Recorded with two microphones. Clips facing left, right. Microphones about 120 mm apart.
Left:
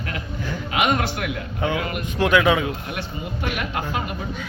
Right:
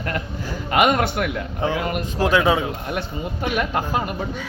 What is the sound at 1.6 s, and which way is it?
Speech, 40° right (ahead or behind).